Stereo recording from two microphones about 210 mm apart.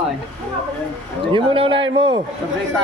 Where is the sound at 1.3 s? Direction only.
25° right (ahead or behind).